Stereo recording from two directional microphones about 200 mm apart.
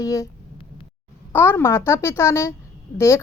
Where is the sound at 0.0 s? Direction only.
15° left (ahead or behind).